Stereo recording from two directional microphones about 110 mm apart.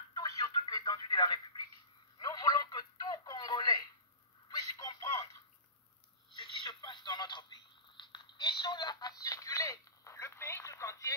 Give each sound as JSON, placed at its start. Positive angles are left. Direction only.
{"t": 0.1, "sound": "telephone", "side_deg": 35}
{"t": 4.5, "sound": "a sound", "side_deg": 35}
{"t": 6.3, "sound": "telephone", "side_deg": 45}